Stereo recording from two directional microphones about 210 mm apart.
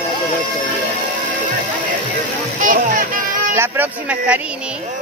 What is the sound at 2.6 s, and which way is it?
Music, 40° right (ahead or behind).